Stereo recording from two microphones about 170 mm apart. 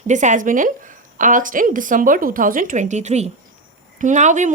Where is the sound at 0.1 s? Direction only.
45° right (ahead or behind).